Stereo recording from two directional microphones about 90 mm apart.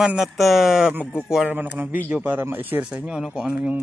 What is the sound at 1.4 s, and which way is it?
Speech, 20° right (ahead or behind).